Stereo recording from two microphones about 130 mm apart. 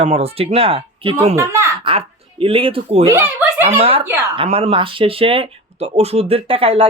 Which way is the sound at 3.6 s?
50° right (ahead or behind).